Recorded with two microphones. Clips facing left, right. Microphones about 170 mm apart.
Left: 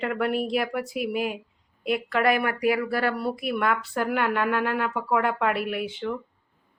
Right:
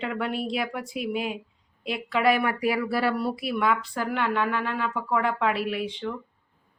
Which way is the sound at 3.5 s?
Centre (ahead or behind).